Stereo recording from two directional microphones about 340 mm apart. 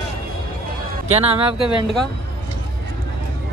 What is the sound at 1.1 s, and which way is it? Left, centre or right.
Speech, centre.